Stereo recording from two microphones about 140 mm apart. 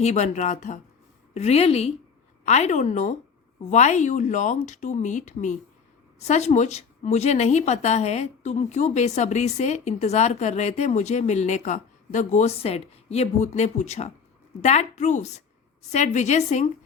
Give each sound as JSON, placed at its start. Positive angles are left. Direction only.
{"t": 0.0, "sound": "a woman's voice", "side_deg": 55}
{"t": 1.3, "sound": "a woman's voice", "side_deg": 50}